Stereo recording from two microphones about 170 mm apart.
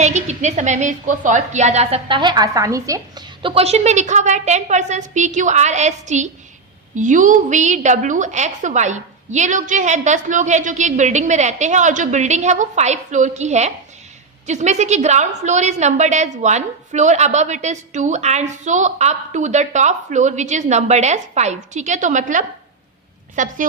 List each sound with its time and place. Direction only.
0.0 s a woman's voice: 45° right (ahead or behind); by 3.2 s 20° right (ahead or behind)
3.4 s a woman's voice: 35° right (ahead or behind)